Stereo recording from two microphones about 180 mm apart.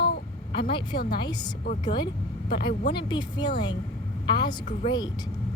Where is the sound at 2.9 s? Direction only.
25° left (ahead or behind).